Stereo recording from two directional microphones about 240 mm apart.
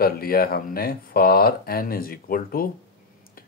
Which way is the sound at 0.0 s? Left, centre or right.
Left.